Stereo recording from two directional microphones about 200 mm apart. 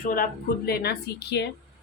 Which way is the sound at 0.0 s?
45° left (ahead or behind).